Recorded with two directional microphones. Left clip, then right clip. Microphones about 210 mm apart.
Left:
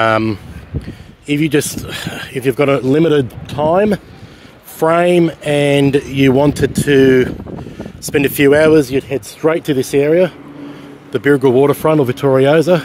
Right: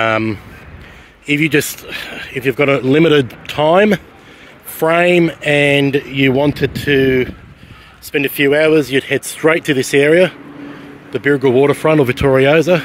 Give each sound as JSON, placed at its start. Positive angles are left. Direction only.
{"t": 0.0, "sound": "speech", "side_deg": 15}
{"t": 4.7, "sound": "speech", "side_deg": 15}
{"t": 8.9, "sound": "speech", "side_deg": 5}
{"t": 11.1, "sound": "speech", "side_deg": 20}